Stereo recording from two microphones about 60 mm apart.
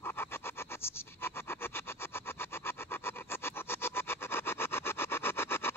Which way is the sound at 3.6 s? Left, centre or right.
Left.